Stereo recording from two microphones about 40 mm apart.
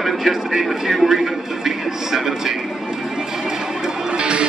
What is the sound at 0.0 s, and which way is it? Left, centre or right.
Speech, centre.